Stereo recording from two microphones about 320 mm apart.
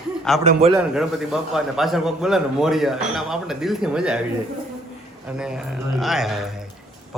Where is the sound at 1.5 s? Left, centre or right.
Centre.